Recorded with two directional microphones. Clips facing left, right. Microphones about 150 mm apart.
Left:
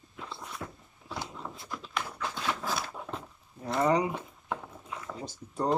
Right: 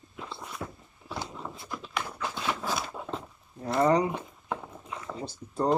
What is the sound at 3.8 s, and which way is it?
Speech, 35° right (ahead or behind).